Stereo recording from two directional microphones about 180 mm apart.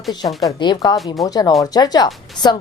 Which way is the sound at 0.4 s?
20° left (ahead or behind).